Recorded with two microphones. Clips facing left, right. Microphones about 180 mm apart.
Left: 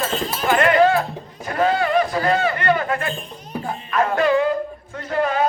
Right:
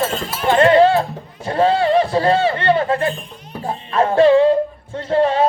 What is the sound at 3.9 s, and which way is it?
Music, 30° right (ahead or behind).